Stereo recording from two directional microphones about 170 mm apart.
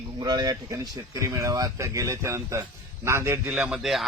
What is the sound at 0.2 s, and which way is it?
Speech, 25° right (ahead or behind).